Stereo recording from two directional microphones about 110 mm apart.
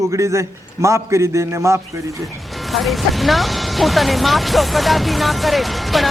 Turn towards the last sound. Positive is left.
turn(degrees=0)  # may be behind; listen again after turning